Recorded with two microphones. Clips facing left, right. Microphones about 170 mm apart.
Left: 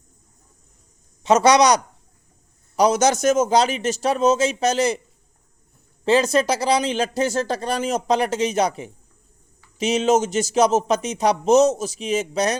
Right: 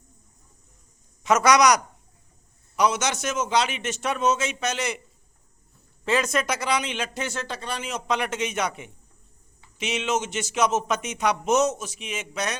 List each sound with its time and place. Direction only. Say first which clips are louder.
1.2 s speech: left 4 dB; 30° left (ahead or behind)
6.1 s speech: left 7 dB; 35° left (ahead or behind)